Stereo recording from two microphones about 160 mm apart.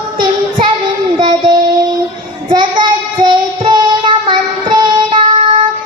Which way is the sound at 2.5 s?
30° right (ahead or behind).